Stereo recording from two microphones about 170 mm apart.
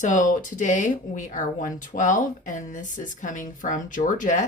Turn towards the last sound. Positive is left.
turn(degrees=45)  # may be behind; listen again after turning